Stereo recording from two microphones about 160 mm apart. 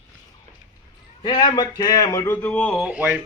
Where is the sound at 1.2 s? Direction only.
25° left (ahead or behind); by 2.8 s 5° left (ahead or behind).